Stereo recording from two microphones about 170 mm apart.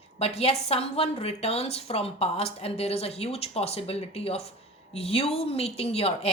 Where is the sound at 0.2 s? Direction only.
35° left (ahead or behind).